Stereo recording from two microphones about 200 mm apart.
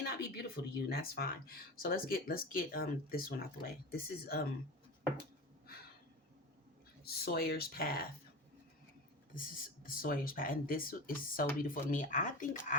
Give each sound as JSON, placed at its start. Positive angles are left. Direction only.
{"t": 0.2, "sound": "speech", "side_deg": 50}
{"t": 7.0, "sound": "speech", "side_deg": 50}
{"t": 9.3, "sound": "speech", "side_deg": 45}